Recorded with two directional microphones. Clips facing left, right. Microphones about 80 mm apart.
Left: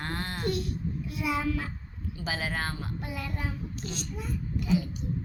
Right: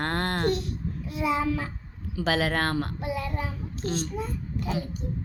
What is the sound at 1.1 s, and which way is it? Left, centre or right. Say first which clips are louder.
Speech: right 4 dB; right.